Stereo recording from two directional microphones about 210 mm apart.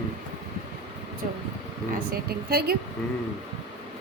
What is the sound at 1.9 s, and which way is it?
Speech, 45° right (ahead or behind).